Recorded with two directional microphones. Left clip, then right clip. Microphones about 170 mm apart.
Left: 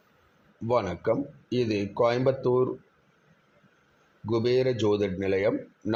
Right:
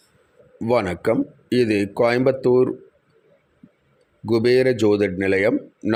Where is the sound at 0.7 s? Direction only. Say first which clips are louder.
Right 6 dB; 45° right (ahead or behind).